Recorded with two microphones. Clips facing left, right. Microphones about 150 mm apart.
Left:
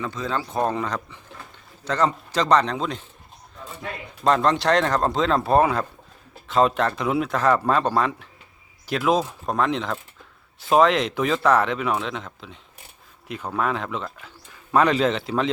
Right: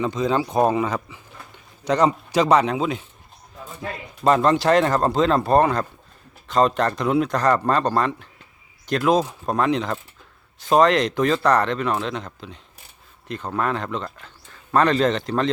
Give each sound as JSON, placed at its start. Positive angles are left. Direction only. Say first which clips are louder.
{"t": 0.0, "sound": "speech", "louder": "right 6 dB", "side_deg": -20}